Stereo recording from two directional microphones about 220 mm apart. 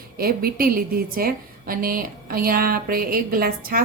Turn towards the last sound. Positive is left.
turn(degrees=-40)  # may be behind; listen again after turning